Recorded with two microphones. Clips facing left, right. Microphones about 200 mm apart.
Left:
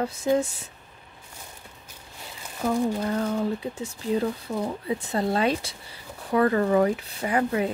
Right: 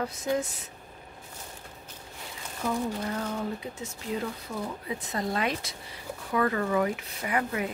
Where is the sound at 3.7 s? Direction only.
30° left (ahead or behind).